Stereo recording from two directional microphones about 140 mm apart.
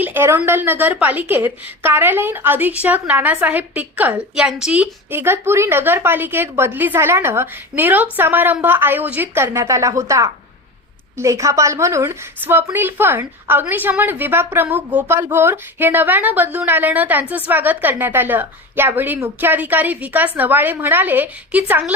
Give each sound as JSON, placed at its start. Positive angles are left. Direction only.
{"t": 0.0, "sound": "a woman's voice", "side_deg": -15}